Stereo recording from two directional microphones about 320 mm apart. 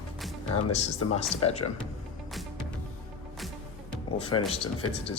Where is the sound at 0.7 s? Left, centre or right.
Centre.